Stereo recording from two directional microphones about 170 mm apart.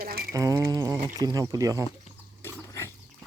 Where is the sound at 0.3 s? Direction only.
20° right (ahead or behind).